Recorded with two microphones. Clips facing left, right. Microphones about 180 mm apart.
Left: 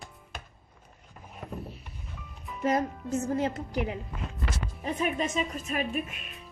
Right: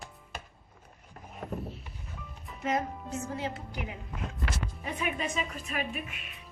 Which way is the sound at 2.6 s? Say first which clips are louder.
Left 4 dB; 40° left (ahead or behind).